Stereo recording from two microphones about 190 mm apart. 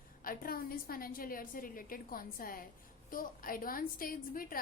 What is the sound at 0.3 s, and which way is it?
A woman's voice, 50° left (ahead or behind).